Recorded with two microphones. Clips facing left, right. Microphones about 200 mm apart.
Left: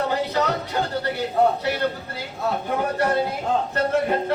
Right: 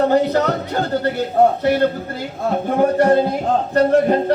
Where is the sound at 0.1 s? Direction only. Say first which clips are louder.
Right 7 dB; 50° right (ahead or behind).